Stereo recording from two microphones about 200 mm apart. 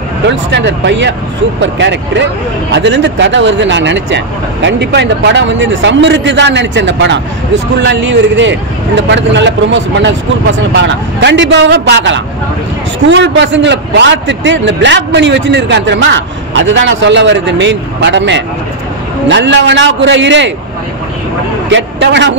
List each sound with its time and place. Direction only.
0.3 s speech: 65° right (ahead or behind)
21.6 s a man's voice: 65° right (ahead or behind)